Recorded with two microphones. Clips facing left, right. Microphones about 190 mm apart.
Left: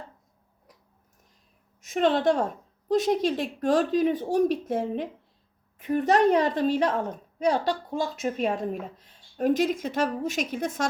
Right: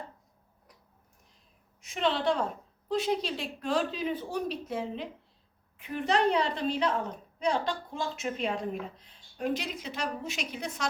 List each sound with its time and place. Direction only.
1.9 s a woman's voice: 45° left (ahead or behind)